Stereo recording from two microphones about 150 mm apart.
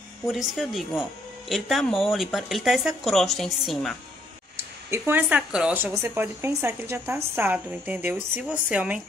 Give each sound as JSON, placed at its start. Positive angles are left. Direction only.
{"t": 0.3, "sound": "speech", "side_deg": 0}
{"t": 4.9, "sound": "a woman's voice", "side_deg": -15}